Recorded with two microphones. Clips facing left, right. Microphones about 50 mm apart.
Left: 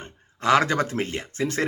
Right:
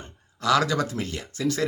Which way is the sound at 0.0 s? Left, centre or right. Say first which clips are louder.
Left 2 dB; left.